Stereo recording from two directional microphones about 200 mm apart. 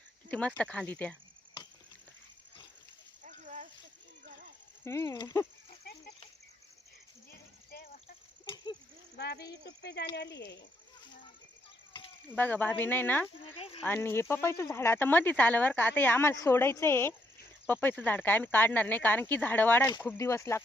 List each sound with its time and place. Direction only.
0.3 s speech: 5° left (ahead or behind)
3.2 s a sound: 35° right (ahead or behind)
4.9 s speech: 15° left (ahead or behind)
9.1 s speech: 55° left (ahead or behind)
12.3 s speech: 10° left (ahead or behind)
13.6 s speech: 30° left (ahead or behind)
13.8 s speech: 10° left (ahead or behind)